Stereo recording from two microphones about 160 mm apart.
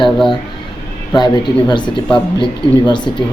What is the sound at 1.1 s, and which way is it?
Speech, 25° left (ahead or behind).